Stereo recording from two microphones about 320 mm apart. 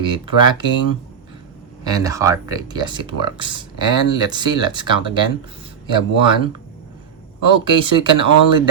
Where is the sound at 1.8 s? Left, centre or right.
Centre.